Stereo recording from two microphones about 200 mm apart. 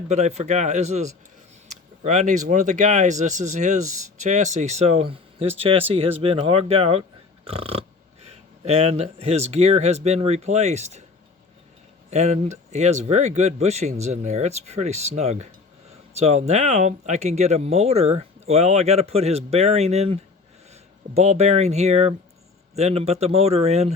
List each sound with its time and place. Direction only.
0.1 s speech: 35° right (ahead or behind)
12.1 s speech: 35° right (ahead or behind)